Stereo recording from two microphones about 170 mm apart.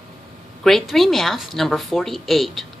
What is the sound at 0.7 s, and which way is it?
A woman's voice, centre (ahead or behind).